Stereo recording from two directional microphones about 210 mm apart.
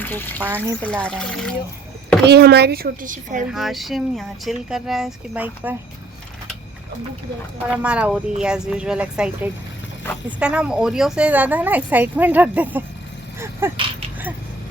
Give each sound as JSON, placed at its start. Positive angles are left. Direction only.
{"t": 0.0, "sound": "speech", "side_deg": 10}
{"t": 0.4, "sound": "speech", "side_deg": -10}
{"t": 1.0, "sound": "speech", "side_deg": 5}
{"t": 2.2, "sound": "speech", "side_deg": -50}
{"t": 3.5, "sound": "speech", "side_deg": 0}
{"t": 7.7, "sound": "speech", "side_deg": -5}